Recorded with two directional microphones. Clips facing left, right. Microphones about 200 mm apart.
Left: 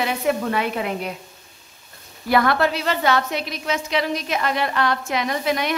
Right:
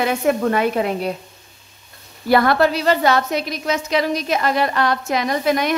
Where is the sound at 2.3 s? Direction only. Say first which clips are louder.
Right 4 dB; 35° right (ahead or behind).